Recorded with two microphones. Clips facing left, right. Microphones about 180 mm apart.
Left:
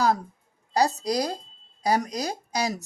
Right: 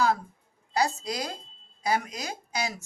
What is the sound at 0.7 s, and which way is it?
Speech, 40° left (ahead or behind).